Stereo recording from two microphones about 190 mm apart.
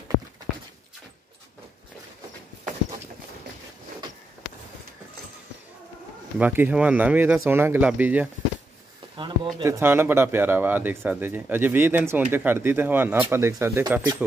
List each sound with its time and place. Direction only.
6.3 s speech: 10° right (ahead or behind)
9.1 s a sound: 25° right (ahead or behind)
9.6 s speech: 15° right (ahead or behind)